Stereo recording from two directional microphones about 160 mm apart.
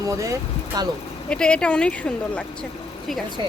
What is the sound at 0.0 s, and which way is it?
Speech, 20° right (ahead or behind).